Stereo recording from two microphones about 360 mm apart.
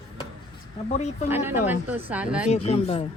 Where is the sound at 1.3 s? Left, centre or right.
Centre.